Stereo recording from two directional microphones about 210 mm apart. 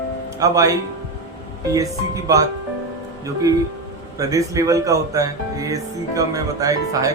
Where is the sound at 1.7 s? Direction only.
15° right (ahead or behind).